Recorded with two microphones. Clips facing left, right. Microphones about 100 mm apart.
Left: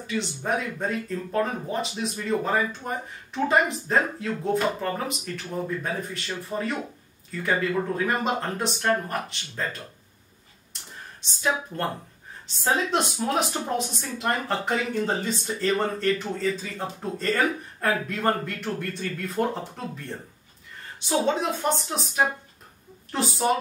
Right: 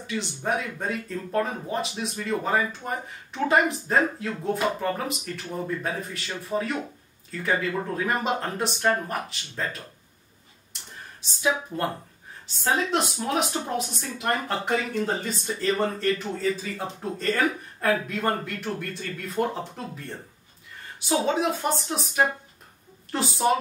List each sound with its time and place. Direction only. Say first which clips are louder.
0.0 s speech: left 1 dB; centre (ahead or behind)
11.4 s speech: right 1 dB; 5° right (ahead or behind)
21.1 s speech: even; centre (ahead or behind)